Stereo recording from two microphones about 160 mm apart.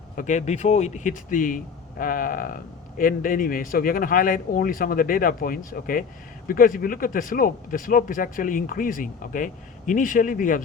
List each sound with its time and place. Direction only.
0.2 s speech: 50° left (ahead or behind)